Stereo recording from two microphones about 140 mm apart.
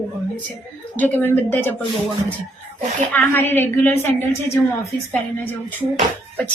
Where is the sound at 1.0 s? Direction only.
15° left (ahead or behind).